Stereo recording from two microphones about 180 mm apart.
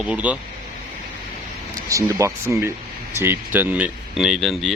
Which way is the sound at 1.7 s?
20° right (ahead or behind).